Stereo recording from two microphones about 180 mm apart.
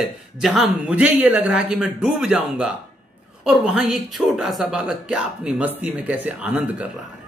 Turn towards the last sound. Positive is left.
turn(degrees=-10)  # may be behind; listen again after turning